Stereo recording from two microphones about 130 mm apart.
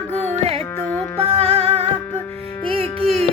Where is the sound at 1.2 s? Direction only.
55° right (ahead or behind).